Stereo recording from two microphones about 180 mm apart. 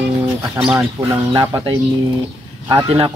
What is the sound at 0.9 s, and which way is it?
Speech, 20° right (ahead or behind).